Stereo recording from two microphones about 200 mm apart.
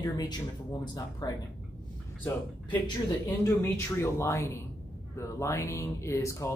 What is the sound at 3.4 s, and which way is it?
Speech, 10° left (ahead or behind).